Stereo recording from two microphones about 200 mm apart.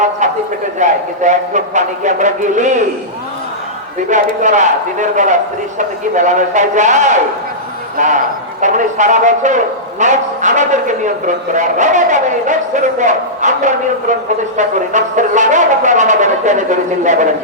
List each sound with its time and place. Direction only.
0.8 s speech: 35° right (ahead or behind)
4.1 s speech: 35° right (ahead or behind)